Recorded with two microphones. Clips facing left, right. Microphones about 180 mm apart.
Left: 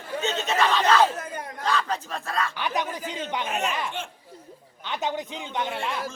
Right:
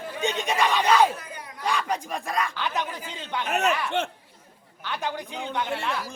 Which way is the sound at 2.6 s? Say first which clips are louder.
Left 1 dB; 15° left (ahead or behind).